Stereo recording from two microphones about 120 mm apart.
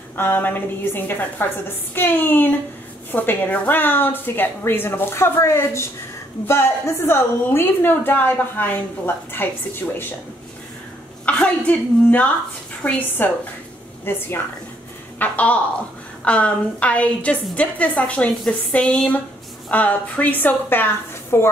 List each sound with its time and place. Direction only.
0.1 s a woman's voice: 15° left (ahead or behind)
11.2 s a woman's voice: 10° left (ahead or behind)